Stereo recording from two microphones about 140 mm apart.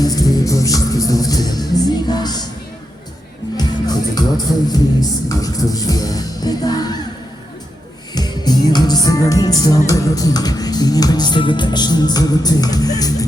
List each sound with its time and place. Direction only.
0.0 s music: 25° left (ahead or behind)
3.6 s music: 30° left (ahead or behind)
8.1 s music: 30° left (ahead or behind)